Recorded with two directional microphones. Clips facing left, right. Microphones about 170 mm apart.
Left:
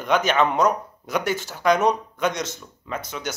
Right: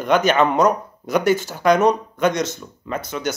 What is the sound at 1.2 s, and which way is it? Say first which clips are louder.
Speech: right 8 dB; 50° right (ahead or behind).